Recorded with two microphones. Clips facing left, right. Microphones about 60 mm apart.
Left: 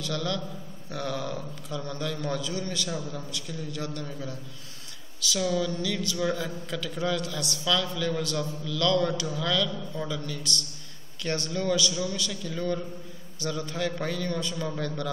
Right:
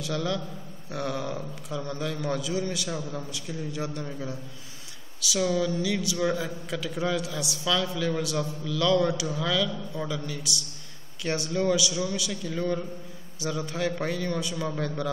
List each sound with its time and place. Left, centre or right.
0.0 s a man's voice: centre